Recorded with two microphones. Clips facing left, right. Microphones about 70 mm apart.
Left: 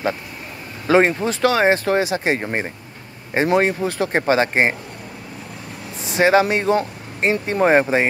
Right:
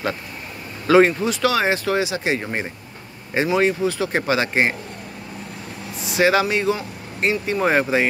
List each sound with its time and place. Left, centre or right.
0.8 s speech: left
2.4 s speech: left
3.4 s speech: left
6.0 s speech: left